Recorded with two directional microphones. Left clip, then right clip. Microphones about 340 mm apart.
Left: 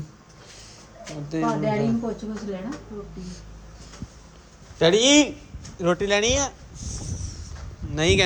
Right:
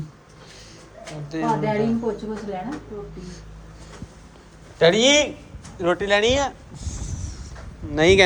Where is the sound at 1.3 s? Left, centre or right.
Left.